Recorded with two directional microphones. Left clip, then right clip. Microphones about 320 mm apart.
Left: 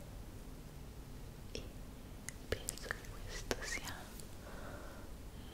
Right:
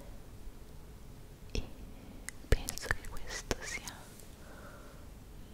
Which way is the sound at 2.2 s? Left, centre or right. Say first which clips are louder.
Right 5 dB; right.